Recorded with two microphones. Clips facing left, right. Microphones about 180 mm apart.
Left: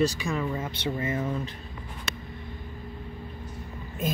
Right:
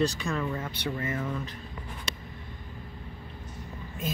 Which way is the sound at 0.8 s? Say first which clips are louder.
Left 4 dB; 25° left (ahead or behind).